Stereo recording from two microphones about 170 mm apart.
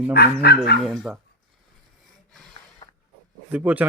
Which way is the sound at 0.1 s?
70° left (ahead or behind).